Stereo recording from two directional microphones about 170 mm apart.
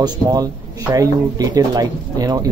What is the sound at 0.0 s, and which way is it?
Speech, 25° right (ahead or behind).